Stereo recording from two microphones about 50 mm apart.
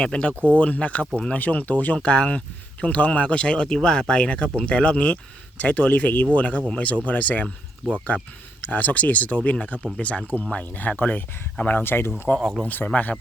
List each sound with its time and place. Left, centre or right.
0.0 s speech: left
7.8 s speech: centre
8.7 s speech: left
12.4 s speech: centre
12.6 s speech: left